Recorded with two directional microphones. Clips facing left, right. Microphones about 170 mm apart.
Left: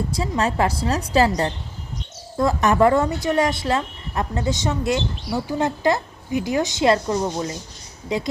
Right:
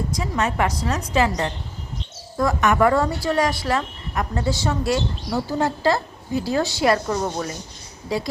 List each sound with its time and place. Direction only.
0.1 s a woman's voice: 30° left (ahead or behind)